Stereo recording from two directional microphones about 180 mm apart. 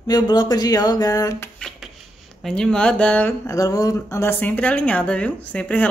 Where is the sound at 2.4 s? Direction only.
5° left (ahead or behind).